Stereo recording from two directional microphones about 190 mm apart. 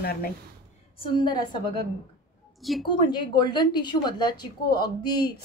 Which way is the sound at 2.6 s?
Centre (ahead or behind).